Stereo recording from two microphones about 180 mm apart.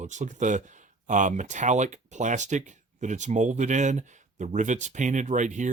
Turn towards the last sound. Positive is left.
turn(degrees=-45)  # may be behind; listen again after turning